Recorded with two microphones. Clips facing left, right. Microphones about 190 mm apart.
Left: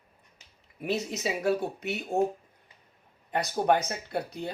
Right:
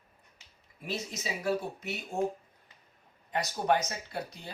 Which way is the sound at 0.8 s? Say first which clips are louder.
Left 7 dB; 65° left (ahead or behind).